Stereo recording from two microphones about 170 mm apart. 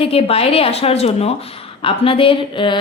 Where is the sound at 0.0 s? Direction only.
35° left (ahead or behind).